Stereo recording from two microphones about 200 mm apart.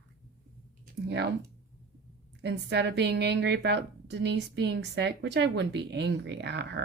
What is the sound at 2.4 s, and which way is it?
A woman's voice, 60° right (ahead or behind).